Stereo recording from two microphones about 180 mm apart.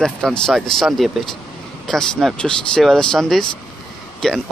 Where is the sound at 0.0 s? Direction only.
5° left (ahead or behind).